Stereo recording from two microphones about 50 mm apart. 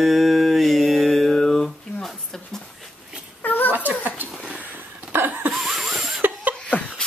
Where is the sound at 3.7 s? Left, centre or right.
Right.